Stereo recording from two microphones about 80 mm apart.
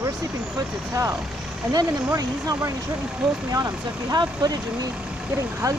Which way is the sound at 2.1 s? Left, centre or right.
Right.